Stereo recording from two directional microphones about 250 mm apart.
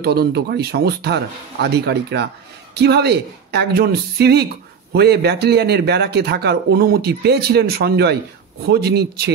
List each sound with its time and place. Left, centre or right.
0.0 s speech: right